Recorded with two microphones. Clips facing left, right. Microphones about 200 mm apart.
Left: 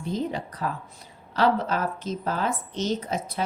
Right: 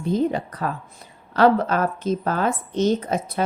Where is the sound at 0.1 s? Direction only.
55° right (ahead or behind).